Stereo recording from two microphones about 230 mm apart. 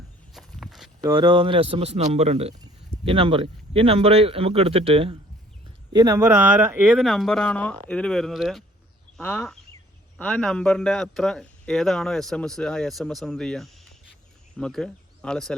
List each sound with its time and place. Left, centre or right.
0.3 s walk: centre
1.0 s speech: centre